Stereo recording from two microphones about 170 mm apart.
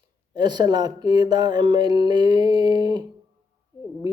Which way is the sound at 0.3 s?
25° right (ahead or behind).